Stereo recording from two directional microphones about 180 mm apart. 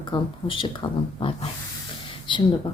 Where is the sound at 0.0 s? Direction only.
25° left (ahead or behind).